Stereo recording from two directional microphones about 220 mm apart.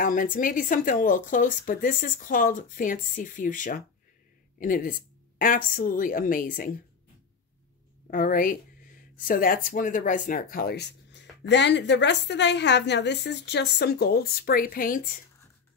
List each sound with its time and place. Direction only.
0.0 s speech: 40° left (ahead or behind)
8.1 s speech: 40° left (ahead or behind)